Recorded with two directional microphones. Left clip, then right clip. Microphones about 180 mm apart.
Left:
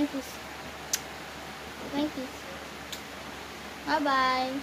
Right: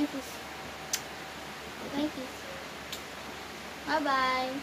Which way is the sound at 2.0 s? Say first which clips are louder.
Left 2 dB; 50° left (ahead or behind).